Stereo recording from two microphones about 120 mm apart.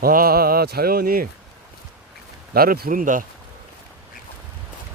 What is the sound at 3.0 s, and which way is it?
Speech, 90° right.